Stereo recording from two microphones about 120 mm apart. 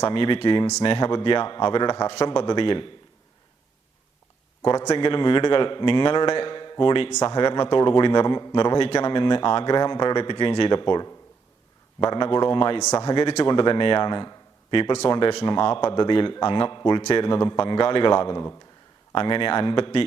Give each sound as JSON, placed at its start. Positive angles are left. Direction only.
{"t": 0.1, "sound": "speech", "side_deg": 45}
{"t": 4.6, "sound": "a man's voice", "side_deg": 35}
{"t": 5.0, "sound": "speech", "side_deg": 45}
{"t": 12.1, "sound": "speech", "side_deg": 45}
{"t": 13.1, "sound": "a man's voice", "side_deg": 30}
{"t": 13.4, "sound": "a man's voice", "side_deg": 45}
{"t": 17.0, "sound": "a man's voice", "side_deg": 55}